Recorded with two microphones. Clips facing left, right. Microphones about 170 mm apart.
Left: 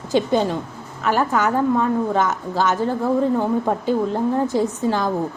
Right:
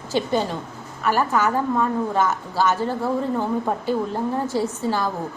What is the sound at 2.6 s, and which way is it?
Speech, 15° left (ahead or behind).